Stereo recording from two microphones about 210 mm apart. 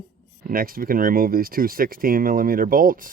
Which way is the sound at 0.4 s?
45° right (ahead or behind).